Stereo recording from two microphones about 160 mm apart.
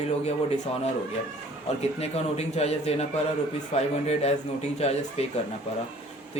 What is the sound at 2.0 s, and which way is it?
A man's voice, 40° left (ahead or behind).